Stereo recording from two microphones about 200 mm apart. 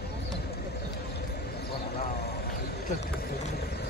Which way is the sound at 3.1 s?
50° left (ahead or behind).